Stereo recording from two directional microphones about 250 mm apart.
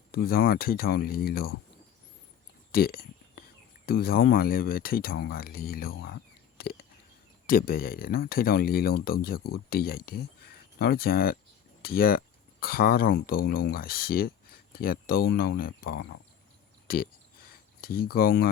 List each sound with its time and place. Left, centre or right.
0.1 s speech: left
2.7 s a sound: left
3.8 s speech: left
7.4 s speech: left
16.8 s speech: left